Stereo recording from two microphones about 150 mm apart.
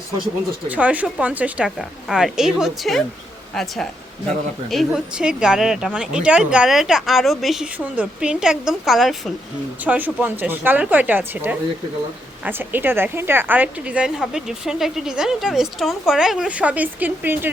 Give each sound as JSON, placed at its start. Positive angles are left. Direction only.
{"t": 0.7, "sound": "a woman's voice", "side_deg": -10}
{"t": 9.8, "sound": "a woman's voice", "side_deg": -10}